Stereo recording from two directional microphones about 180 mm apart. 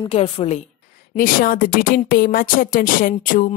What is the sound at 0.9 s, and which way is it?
Speech, 50° left (ahead or behind).